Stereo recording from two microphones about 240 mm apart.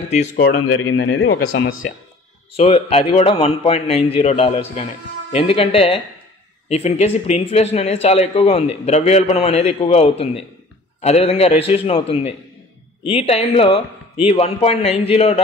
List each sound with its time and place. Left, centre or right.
0.1 s speech: left
0.5 s speech: left
2.5 s speech: left